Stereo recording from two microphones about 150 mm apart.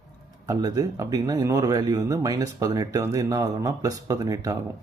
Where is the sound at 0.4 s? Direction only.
25° right (ahead or behind).